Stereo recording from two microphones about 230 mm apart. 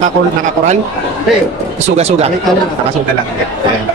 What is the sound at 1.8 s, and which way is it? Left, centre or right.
Speech, right.